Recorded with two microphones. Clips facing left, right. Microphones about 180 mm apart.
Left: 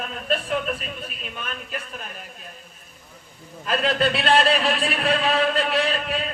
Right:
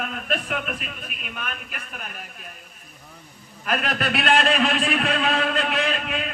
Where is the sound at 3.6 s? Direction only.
30° left (ahead or behind).